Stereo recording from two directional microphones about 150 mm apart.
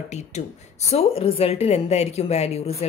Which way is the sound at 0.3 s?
50° left (ahead or behind).